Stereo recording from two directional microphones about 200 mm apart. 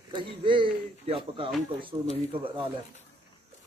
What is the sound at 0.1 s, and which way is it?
Speech, 25° right (ahead or behind).